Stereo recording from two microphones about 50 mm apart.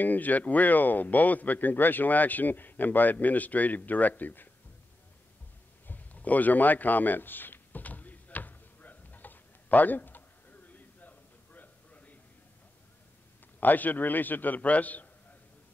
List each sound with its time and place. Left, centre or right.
0.0 s speech: left
5.9 s a sound: left
13.6 s speech: left